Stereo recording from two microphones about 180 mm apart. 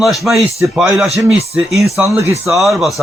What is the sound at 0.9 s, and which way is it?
Speech, centre (ahead or behind).